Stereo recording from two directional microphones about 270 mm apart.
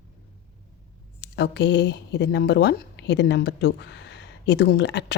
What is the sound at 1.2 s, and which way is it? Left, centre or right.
Speech, left.